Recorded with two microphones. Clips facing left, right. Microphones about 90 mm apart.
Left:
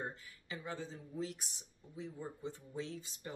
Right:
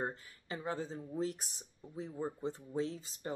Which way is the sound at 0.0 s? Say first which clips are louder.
Right 5 dB; 35° right (ahead or behind).